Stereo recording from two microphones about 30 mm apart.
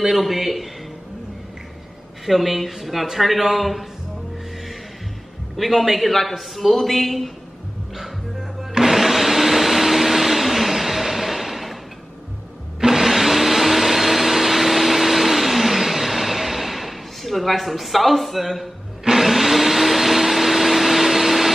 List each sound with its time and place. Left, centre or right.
0.0 s a man's voice: centre
2.2 s a man's voice: centre
5.7 s a man's voice: centre
8.8 s vacuum cleaner: centre
12.8 s vacuum cleaner: centre